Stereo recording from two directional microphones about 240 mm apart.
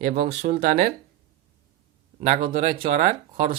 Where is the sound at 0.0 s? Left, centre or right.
Right.